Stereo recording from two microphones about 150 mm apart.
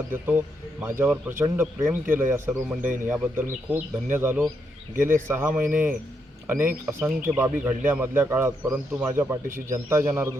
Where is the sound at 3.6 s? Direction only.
10° right (ahead or behind).